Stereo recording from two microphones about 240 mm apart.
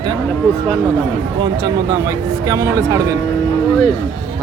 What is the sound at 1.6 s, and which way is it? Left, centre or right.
Speech, centre.